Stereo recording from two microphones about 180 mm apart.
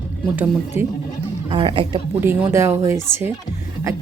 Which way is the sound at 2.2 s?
15° right (ahead or behind).